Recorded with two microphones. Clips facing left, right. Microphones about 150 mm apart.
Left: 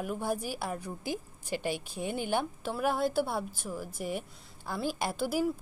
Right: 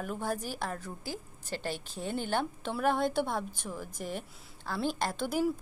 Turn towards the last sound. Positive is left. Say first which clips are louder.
# even
turn(degrees=5)  # may be behind; listen again after turning